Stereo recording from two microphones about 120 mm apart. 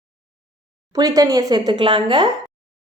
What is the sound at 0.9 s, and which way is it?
A woman's voice, 30° right (ahead or behind).